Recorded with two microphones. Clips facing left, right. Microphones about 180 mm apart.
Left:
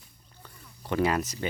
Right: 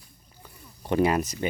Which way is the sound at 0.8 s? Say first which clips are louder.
Right 3 dB; 20° right (ahead or behind).